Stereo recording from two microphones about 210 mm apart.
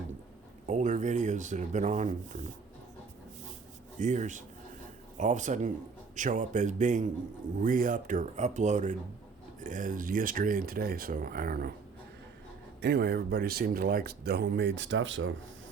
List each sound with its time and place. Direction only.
0.7 s speech: 35° right (ahead or behind)
3.9 s speech: 35° right (ahead or behind)
12.8 s speech: 50° right (ahead or behind)